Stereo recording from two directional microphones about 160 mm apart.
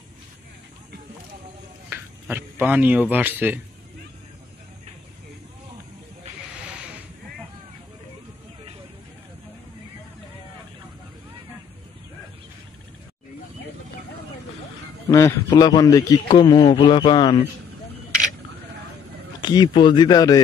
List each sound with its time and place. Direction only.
1.9 s speech: 10° right (ahead or behind)
15.0 s a man's voice: 20° left (ahead or behind)
19.4 s a man's voice: 25° left (ahead or behind)